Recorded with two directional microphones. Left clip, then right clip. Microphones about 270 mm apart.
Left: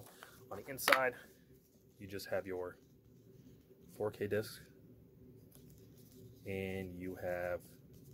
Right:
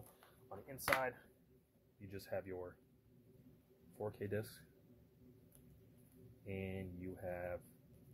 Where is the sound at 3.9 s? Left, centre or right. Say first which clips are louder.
Left 7 dB; centre.